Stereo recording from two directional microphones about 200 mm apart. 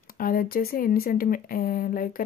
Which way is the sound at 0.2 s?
45° left (ahead or behind).